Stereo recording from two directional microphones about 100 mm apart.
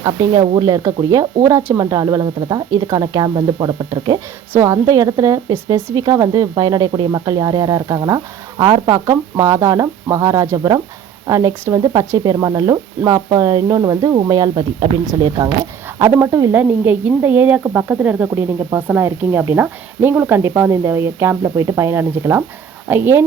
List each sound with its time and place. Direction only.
0.0 s a woman's voice: 50° right (ahead or behind); by 1.9 s 30° right (ahead or behind)
1.9 s a woman's voice: 40° right (ahead or behind)
4.5 s a woman's voice: 30° right (ahead or behind)
16.5 s speech: 15° right (ahead or behind)